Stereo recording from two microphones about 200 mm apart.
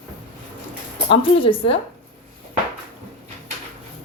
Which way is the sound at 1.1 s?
25° left (ahead or behind).